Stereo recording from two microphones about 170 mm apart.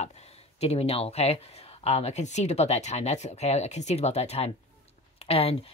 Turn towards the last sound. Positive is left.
turn(degrees=35)  # may be behind; listen again after turning